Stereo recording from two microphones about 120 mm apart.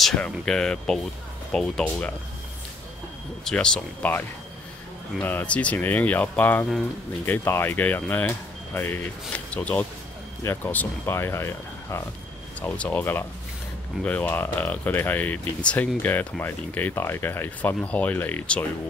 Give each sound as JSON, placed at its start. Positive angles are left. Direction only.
{"t": 0.0, "sound": "speech", "side_deg": 5}
{"t": 3.4, "sound": "speech", "side_deg": 5}
{"t": 5.2, "sound": "speech", "side_deg": 15}
{"t": 12.6, "sound": "speech", "side_deg": 10}